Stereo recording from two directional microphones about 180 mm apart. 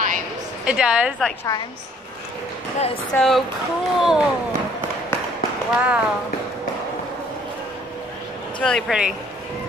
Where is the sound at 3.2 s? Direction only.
Centre (ahead or behind).